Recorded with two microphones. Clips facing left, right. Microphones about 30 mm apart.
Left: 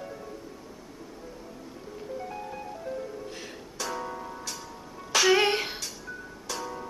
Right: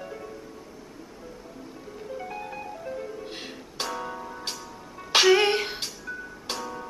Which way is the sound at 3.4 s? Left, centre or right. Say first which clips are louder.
Right 3 dB; right.